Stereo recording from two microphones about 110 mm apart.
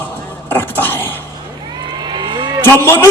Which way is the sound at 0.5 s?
20° left (ahead or behind).